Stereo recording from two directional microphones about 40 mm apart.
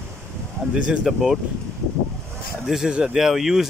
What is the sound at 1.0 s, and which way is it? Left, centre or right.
Speech, centre.